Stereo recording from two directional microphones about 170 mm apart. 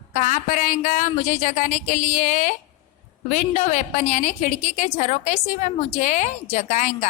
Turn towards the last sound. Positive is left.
turn(degrees=45)  # may be behind; listen again after turning